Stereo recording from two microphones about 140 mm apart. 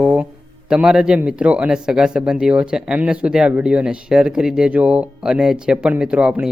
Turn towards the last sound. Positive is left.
turn(degrees=-5)  # may be behind; listen again after turning